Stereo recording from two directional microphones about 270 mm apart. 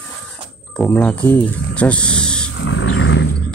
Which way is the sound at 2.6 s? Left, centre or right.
Left.